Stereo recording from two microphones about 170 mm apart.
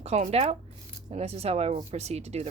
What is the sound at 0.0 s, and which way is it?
Speech, 40° right (ahead or behind).